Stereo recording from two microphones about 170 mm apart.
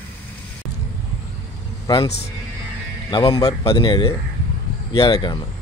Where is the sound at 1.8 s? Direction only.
20° left (ahead or behind).